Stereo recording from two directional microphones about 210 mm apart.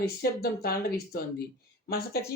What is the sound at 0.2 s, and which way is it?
Speech, 45° left (ahead or behind).